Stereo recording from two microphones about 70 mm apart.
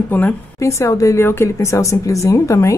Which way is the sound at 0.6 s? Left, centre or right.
Left.